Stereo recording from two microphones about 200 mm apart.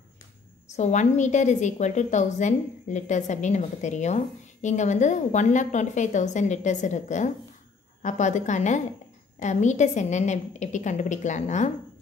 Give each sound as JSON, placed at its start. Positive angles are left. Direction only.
{"t": 0.7, "sound": "a woman's voice", "side_deg": 35}